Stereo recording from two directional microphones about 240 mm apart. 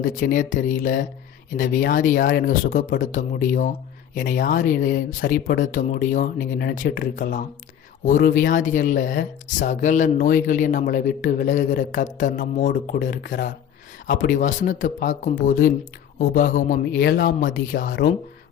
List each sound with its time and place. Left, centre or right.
0.0 s speech: left